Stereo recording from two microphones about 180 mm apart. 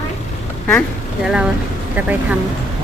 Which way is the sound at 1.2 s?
5° right (ahead or behind).